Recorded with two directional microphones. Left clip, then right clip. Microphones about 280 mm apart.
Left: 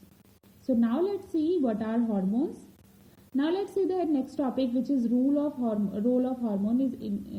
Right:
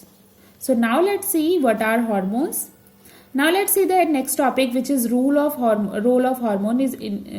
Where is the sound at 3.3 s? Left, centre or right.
Right.